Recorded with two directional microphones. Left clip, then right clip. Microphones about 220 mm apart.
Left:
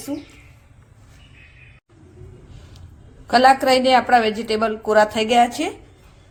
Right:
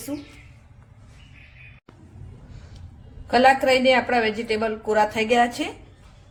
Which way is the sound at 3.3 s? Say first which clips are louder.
Left 3 dB; 25° left (ahead or behind).